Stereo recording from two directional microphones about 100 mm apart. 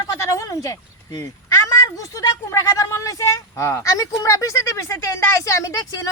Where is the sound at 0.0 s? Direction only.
30° left (ahead or behind).